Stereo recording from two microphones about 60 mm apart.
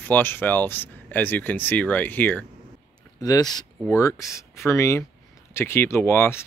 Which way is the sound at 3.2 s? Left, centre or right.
Left.